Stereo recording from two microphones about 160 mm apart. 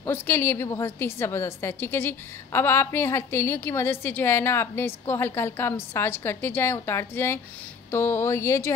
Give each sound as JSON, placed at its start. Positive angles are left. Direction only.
{"t": 0.0, "sound": "a woman's voice", "side_deg": 15}